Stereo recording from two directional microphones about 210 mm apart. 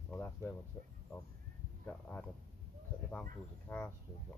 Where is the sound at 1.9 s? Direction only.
5° left (ahead or behind).